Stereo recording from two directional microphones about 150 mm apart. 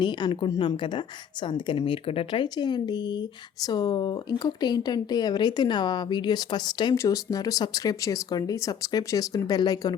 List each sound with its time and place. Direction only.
0.0 s a woman's voice: 30° left (ahead or behind)